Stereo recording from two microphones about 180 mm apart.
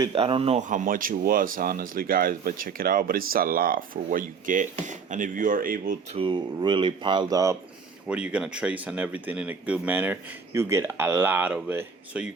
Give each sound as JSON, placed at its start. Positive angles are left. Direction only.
{"t": 0.0, "sound": "speech", "side_deg": -30}
{"t": 6.1, "sound": "speech", "side_deg": -30}
{"t": 8.0, "sound": "speech", "side_deg": -5}